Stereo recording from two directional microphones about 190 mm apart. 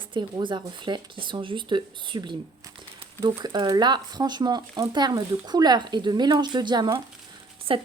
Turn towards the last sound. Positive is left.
turn(degrees=-30)  # may be behind; listen again after turning